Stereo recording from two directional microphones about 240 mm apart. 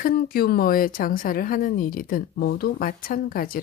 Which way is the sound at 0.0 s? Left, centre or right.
Left.